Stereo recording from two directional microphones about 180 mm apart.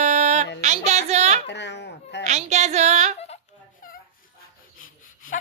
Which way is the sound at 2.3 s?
40° right (ahead or behind).